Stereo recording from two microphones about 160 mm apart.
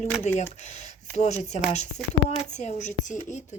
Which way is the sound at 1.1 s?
45° left (ahead or behind).